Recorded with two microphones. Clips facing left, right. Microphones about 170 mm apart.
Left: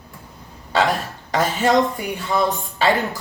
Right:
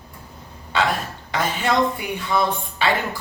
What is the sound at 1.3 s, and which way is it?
Speech, 40° left (ahead or behind).